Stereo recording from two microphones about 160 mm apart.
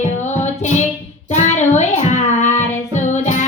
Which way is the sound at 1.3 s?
45° left (ahead or behind).